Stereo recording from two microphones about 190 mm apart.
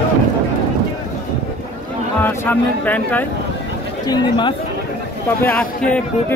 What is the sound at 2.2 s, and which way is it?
Speech, 10° left (ahead or behind).